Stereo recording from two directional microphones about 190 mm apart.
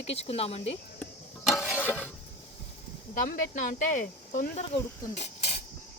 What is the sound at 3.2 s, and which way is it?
Speech, 45° left (ahead or behind).